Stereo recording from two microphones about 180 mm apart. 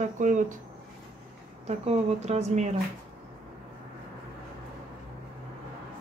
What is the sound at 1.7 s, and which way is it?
Speech, 35° right (ahead or behind).